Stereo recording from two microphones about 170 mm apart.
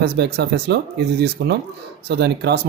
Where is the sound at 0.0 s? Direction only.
70° right (ahead or behind).